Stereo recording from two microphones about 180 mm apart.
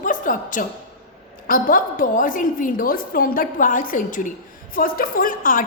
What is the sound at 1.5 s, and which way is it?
A woman's voice, 50° left (ahead or behind).